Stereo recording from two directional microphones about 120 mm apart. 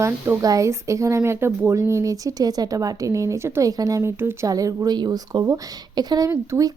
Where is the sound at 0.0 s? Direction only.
25° right (ahead or behind).